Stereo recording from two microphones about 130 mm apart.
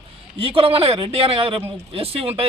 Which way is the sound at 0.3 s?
45° right (ahead or behind).